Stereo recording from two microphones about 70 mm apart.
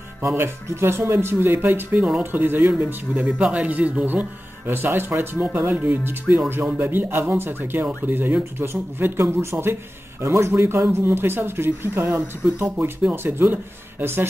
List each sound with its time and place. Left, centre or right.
0.3 s speech: right